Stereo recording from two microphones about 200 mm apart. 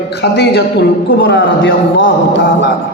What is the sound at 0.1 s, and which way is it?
A man's voice, 55° left (ahead or behind).